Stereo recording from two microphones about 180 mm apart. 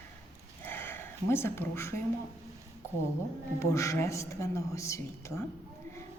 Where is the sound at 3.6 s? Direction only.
15° left (ahead or behind).